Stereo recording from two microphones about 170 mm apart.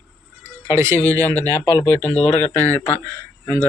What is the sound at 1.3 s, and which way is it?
Speech, 10° left (ahead or behind).